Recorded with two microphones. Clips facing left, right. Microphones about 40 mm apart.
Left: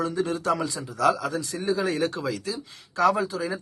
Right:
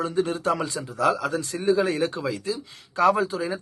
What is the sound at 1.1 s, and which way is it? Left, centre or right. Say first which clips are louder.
A man's voice: right 2 dB; right.